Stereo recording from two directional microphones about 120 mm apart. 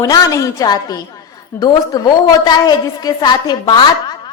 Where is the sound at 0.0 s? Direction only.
30° left (ahead or behind).